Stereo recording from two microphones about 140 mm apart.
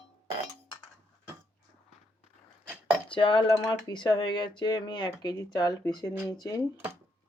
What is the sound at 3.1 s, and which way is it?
Speech, 35° left (ahead or behind).